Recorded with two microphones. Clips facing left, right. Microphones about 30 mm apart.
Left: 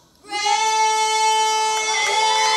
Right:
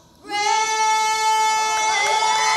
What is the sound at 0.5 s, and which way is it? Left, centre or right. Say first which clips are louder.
Child singing: left 3 dB; left.